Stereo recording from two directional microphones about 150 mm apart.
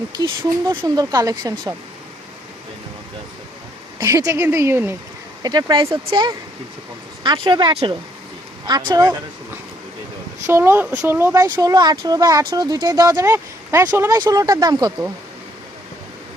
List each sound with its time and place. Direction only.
0.2 s speech: 25° right (ahead or behind)
4.0 s speech: 20° right (ahead or behind)
5.4 s speech: 30° right (ahead or behind)
10.4 s speech: 15° right (ahead or behind)
11.5 s speech: 25° right (ahead or behind)